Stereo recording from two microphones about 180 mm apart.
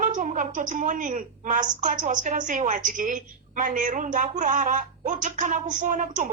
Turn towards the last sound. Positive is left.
turn(degrees=-45)  # may be behind; listen again after turning